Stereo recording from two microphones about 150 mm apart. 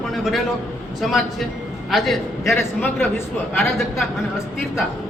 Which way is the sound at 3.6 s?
Centre (ahead or behind).